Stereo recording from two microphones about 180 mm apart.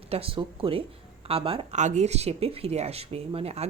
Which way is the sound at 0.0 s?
30° right (ahead or behind).